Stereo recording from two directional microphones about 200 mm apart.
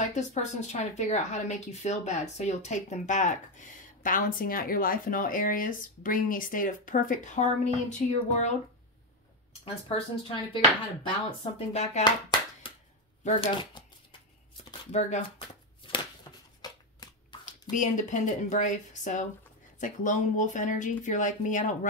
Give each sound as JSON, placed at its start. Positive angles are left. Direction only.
{"t": 0.1, "sound": "a woman's voice", "side_deg": 35}
{"t": 9.8, "sound": "a woman's voice", "side_deg": 25}
{"t": 12.0, "sound": "clapping", "side_deg": 20}
{"t": 13.2, "sound": "speech", "side_deg": 35}
{"t": 14.6, "sound": "shuffling cards", "side_deg": 30}
{"t": 15.8, "sound": "a sound", "side_deg": 25}
{"t": 16.6, "sound": "shuffling cards", "side_deg": 20}
{"t": 17.5, "sound": "a woman's voice", "side_deg": 40}